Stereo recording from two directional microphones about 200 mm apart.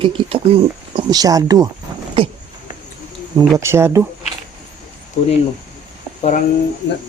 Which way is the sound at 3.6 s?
15° right (ahead or behind).